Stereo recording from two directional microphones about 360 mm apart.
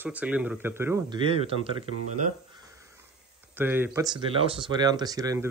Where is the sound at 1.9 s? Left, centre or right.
Right.